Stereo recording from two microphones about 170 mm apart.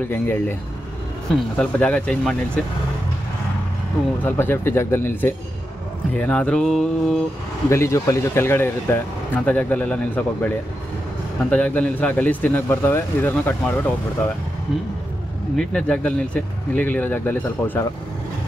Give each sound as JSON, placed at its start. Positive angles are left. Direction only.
{"t": 0.1, "sound": "speech", "side_deg": 10}
{"t": 4.2, "sound": "speech", "side_deg": 10}
{"t": 7.7, "sound": "speech", "side_deg": 15}
{"t": 11.5, "sound": "speech", "side_deg": 10}
{"t": 15.5, "sound": "speech", "side_deg": 5}